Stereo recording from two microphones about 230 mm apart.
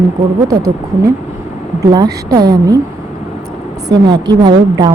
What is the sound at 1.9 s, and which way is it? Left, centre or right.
Speech, centre.